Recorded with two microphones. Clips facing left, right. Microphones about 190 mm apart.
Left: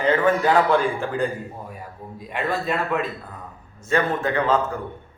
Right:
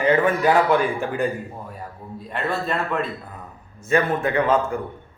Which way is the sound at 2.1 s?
10° left (ahead or behind).